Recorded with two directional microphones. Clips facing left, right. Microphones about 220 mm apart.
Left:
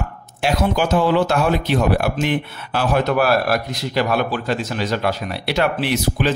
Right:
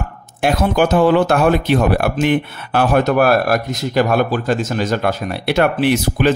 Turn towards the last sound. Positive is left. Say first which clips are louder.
# right 5 dB
turn(degrees=-55)  # may be behind; listen again after turning